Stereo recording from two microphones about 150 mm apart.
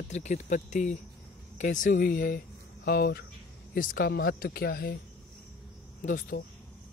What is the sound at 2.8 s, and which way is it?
Speech, 90° left.